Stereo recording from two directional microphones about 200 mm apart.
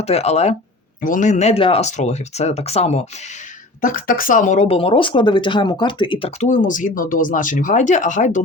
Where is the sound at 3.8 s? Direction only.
45° left (ahead or behind).